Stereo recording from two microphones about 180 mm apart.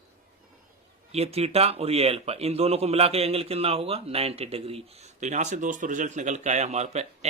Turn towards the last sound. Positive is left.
turn(degrees=-35)  # may be behind; listen again after turning